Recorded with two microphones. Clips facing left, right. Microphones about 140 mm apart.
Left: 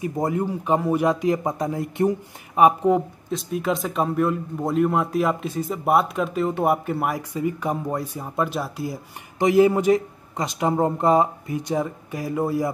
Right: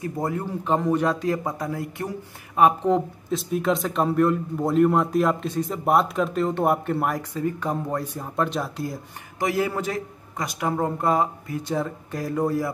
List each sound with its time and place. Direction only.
0.0 s speech: 20° left (ahead or behind)
3.3 s a man's voice: centre (ahead or behind)
9.4 s speech: 20° left (ahead or behind)